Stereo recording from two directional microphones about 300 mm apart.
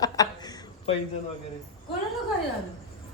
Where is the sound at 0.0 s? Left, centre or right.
Centre.